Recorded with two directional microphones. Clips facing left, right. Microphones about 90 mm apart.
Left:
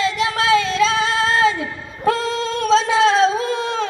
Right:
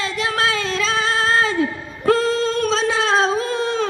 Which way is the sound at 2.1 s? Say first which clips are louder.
Right 3 dB; 40° right (ahead or behind).